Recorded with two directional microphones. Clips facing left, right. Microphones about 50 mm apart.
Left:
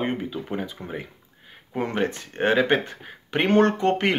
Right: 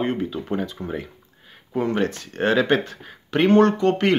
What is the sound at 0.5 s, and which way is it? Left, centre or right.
Speech, centre.